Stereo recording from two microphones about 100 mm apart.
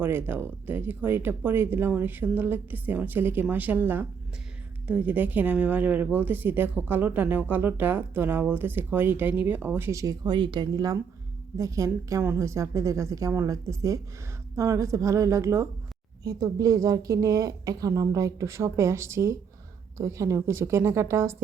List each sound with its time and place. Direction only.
0.0 s speech: 20° right (ahead or behind); by 10.9 s 45° right (ahead or behind)
11.5 s a woman's voice: 35° right (ahead or behind)